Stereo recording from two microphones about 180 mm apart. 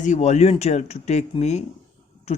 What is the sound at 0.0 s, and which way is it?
Speech, 40° left (ahead or behind).